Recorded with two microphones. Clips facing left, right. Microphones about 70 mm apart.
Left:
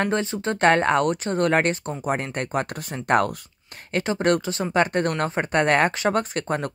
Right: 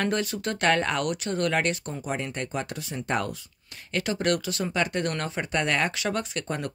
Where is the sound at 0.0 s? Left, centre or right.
Left.